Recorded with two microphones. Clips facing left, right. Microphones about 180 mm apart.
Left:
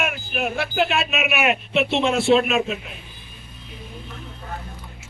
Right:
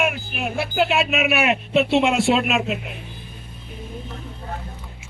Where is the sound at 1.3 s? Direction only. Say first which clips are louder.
Right 1 dB; 35° right (ahead or behind).